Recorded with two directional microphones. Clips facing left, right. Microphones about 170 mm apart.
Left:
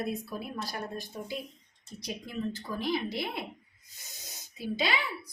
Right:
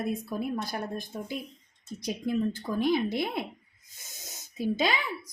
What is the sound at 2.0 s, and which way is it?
A woman's voice, 50° right (ahead or behind).